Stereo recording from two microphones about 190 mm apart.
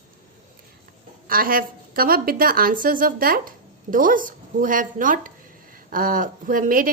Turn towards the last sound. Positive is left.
turn(degrees=-45)  # may be behind; listen again after turning